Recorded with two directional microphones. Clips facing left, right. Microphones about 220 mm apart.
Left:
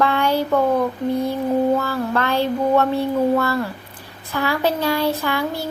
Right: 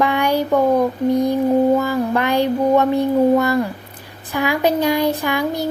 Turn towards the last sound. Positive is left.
turn(degrees=-15)  # may be behind; listen again after turning